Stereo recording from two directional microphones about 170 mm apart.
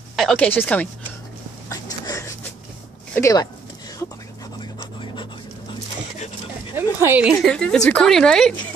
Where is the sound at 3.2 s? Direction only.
20° left (ahead or behind).